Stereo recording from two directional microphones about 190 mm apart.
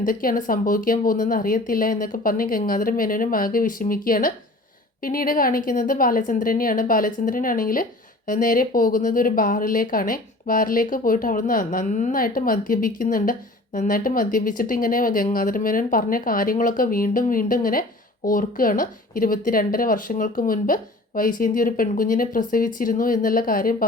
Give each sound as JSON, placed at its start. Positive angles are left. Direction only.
{"t": 0.0, "sound": "speech", "side_deg": 45}